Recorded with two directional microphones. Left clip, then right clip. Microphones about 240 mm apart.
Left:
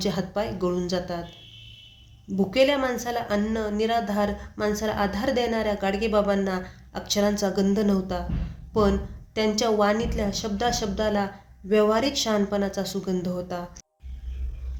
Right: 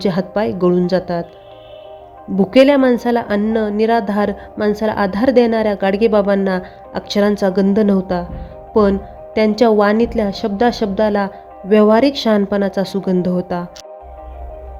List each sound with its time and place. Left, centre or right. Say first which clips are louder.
0.0 s a woman's voice: right 10 dB; right
2.4 s a woman's voice: right 11 dB; right